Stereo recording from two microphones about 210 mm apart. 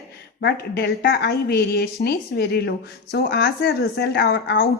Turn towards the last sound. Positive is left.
turn(degrees=60)  # may be behind; listen again after turning